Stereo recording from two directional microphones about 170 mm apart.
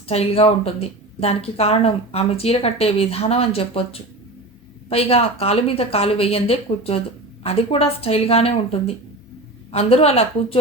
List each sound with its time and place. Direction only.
0.1 s speech: 35° left (ahead or behind)
9.7 s speech: 35° left (ahead or behind)